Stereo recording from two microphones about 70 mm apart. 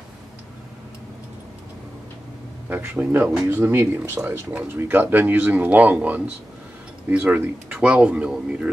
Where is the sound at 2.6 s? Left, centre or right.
Right.